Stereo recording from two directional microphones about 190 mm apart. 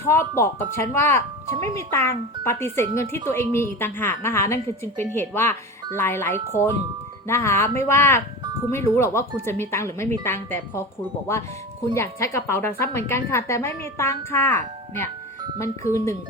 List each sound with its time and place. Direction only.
0.1 s a woman's voice: 15° left (ahead or behind)
11.9 s a woman's voice: 15° left (ahead or behind)